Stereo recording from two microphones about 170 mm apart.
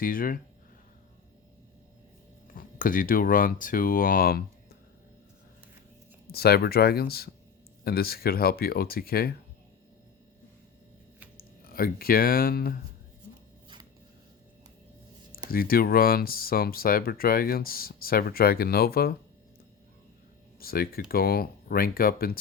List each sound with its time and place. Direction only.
0.0 s speech: 55° left (ahead or behind)
2.6 s speech: 55° left (ahead or behind)
6.3 s speech: 65° left (ahead or behind)
11.3 s speech: 60° left (ahead or behind)
15.4 s speech: 60° left (ahead or behind)
20.6 s speech: 60° left (ahead or behind)